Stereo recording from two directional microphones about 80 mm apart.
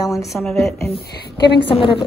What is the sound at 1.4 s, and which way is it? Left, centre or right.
Speech, left.